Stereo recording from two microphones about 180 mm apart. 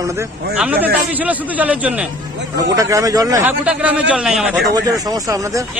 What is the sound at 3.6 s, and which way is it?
Speech, 5° right (ahead or behind).